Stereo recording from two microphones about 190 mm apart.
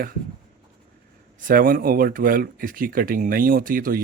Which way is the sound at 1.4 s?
45° right (ahead or behind).